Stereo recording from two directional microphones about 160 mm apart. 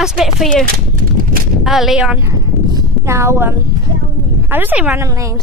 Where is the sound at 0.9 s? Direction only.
60° right (ahead or behind).